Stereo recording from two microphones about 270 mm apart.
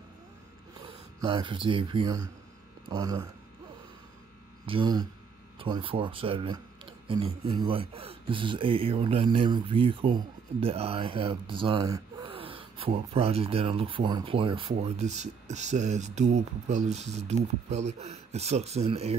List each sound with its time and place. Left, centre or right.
0.8 s speech: centre
4.6 s speech: centre